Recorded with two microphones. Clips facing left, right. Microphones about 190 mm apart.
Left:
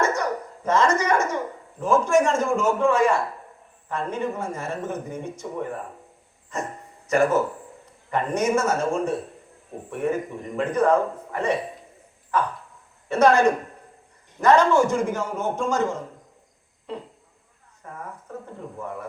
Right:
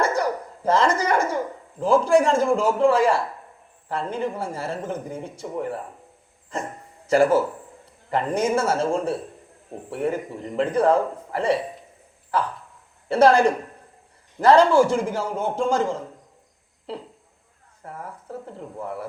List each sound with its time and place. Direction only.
0.0 s a sound: 30° right (ahead or behind)
1.8 s speech: 30° right (ahead or behind)
7.1 s speech: 30° right (ahead or behind)
13.1 s speech: 30° right (ahead or behind)
18.8 s speech: 30° right (ahead or behind)